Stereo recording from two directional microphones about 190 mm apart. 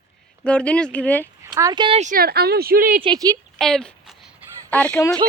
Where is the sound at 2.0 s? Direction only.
50° right (ahead or behind).